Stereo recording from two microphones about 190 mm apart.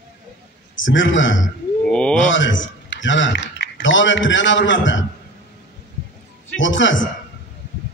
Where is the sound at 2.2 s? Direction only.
75° left (ahead or behind).